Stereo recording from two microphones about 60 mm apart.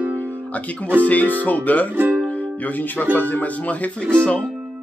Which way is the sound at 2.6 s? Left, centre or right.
Left.